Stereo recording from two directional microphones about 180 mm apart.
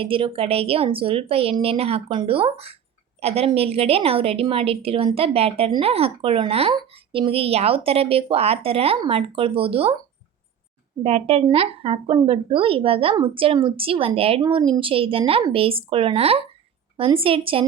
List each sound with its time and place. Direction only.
0.0 s a woman's voice: 30° right (ahead or behind)
11.0 s a woman's voice: 35° right (ahead or behind)